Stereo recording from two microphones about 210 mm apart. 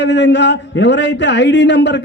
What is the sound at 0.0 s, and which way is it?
A man's voice, 55° left (ahead or behind).